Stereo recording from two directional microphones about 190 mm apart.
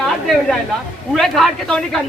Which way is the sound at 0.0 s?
Centre (ahead or behind).